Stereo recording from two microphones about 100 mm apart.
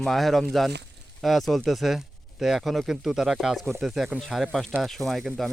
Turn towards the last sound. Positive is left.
turn(degrees=0)  # may be behind; listen again after turning